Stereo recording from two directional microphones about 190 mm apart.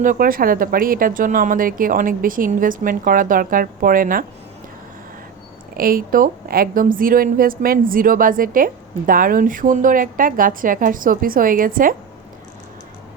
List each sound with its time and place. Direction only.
0.0 s a woman's voice: 45° right (ahead or behind)
5.7 s a woman's voice: 50° right (ahead or behind)